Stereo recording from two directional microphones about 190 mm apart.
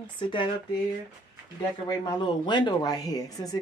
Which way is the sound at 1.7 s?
20° left (ahead or behind).